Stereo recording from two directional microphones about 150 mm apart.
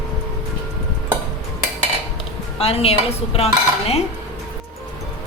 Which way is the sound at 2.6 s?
40° left (ahead or behind).